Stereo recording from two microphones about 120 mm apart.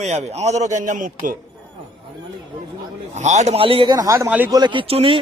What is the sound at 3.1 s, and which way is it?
Speech, 80° right.